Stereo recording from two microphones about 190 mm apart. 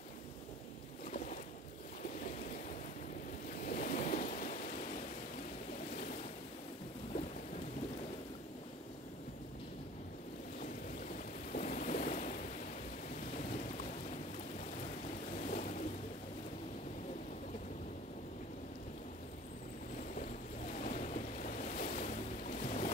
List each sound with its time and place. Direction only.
3.6 s waves: 45° left (ahead or behind)
10.6 s boat: 40° left (ahead or behind)
15.3 s ocean: 40° left (ahead or behind)
20.7 s ocean: 40° left (ahead or behind)